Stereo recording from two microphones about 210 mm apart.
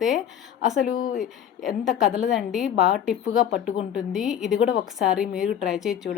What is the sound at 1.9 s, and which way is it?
A woman's voice, centre (ahead or behind).